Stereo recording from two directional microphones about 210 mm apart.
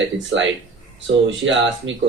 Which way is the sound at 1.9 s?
65° right (ahead or behind).